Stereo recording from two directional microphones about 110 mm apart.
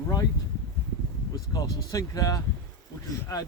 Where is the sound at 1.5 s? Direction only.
35° left (ahead or behind).